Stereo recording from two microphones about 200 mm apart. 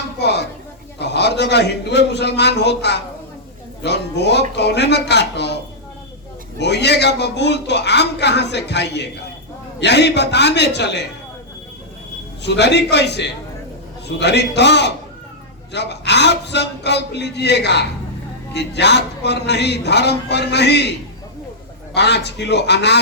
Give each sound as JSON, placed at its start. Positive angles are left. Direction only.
{"t": 0.2, "sound": "a sound", "side_deg": 55}
{"t": 0.9, "sound": "a man's voice", "side_deg": 55}
{"t": 6.6, "sound": "a man's voice", "side_deg": 55}
{"t": 12.4, "sound": "a man's voice", "side_deg": 60}
{"t": 21.9, "sound": "a man's voice", "side_deg": 55}